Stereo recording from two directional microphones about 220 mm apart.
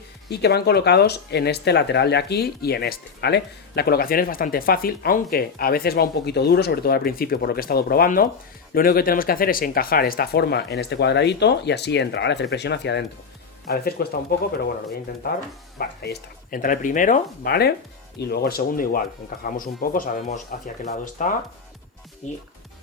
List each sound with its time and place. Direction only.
0.3 s speech: 50° left (ahead or behind)
15.8 s speech: 45° left (ahead or behind)